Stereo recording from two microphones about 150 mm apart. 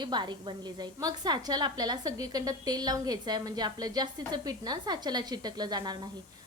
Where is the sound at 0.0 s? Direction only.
30° right (ahead or behind).